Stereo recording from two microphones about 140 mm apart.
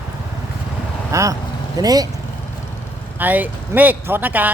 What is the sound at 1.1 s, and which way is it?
Speech, 25° right (ahead or behind).